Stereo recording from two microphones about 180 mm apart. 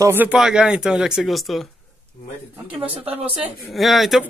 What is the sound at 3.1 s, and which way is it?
Speech, 5° right (ahead or behind).